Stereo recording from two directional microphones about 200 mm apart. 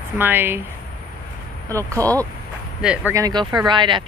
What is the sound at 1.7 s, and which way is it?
Speech, 15° right (ahead or behind).